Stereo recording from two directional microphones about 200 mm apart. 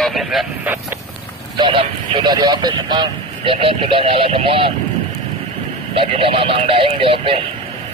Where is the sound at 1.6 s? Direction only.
25° right (ahead or behind).